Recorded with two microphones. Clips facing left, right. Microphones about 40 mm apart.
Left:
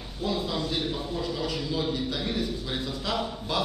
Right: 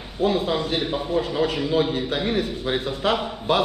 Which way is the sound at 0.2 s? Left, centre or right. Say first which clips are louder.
Right 8 dB; right.